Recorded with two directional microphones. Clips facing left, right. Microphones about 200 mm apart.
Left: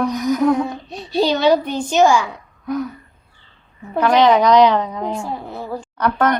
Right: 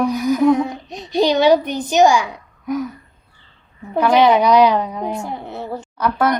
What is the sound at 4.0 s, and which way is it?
A woman's voice, 10° right (ahead or behind).